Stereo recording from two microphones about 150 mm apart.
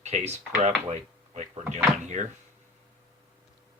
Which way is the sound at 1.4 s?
50° right (ahead or behind).